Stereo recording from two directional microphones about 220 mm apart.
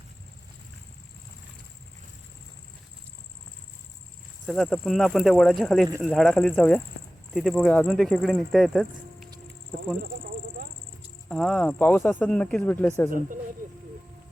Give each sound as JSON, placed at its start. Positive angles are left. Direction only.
{"t": 4.4, "sound": "speech", "side_deg": 0}
{"t": 11.3, "sound": "speech", "side_deg": 0}
{"t": 13.1, "sound": "speech", "side_deg": -40}